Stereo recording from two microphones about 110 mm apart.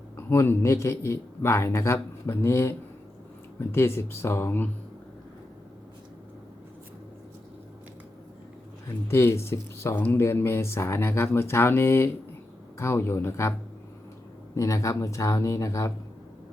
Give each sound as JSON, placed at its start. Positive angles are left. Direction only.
{"t": 0.2, "sound": "speech", "side_deg": 20}
{"t": 9.0, "sound": "speech", "side_deg": 25}
{"t": 14.5, "sound": "speech", "side_deg": 30}